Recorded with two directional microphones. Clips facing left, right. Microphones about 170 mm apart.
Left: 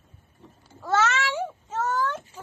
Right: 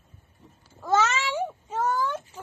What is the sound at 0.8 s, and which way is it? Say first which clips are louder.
Speech: even; 15° right (ahead or behind).